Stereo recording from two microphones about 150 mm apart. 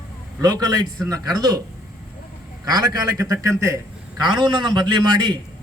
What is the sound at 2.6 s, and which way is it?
A man's voice, 25° right (ahead or behind).